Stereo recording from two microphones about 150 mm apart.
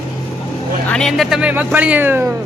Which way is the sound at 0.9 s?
5° left (ahead or behind).